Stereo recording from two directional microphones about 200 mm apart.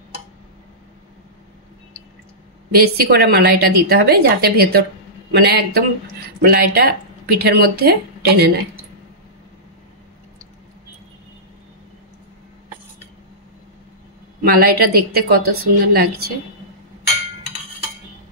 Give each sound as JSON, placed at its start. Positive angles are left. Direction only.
{"t": 3.0, "sound": "speech", "side_deg": -50}
{"t": 14.4, "sound": "speech", "side_deg": -50}